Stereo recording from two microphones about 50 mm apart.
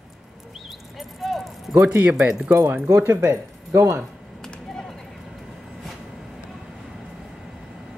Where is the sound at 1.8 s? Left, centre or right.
Right.